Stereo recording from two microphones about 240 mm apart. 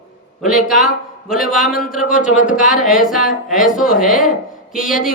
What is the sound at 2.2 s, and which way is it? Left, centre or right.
Speech, left.